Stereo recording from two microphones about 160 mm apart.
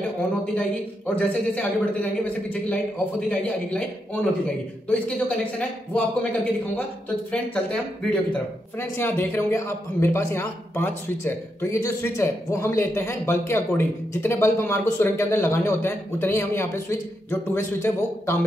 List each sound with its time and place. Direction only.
0.6 s speech: 10° left (ahead or behind)
7.2 s speech: 10° left (ahead or behind)